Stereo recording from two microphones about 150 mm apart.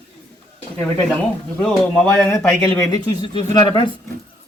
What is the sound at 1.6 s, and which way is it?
Speech, 5° left (ahead or behind).